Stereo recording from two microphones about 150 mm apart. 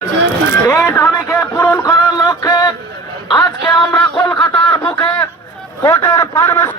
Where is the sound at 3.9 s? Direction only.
25° left (ahead or behind).